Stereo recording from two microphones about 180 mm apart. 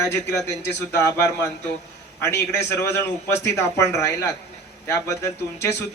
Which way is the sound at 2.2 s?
15° left (ahead or behind).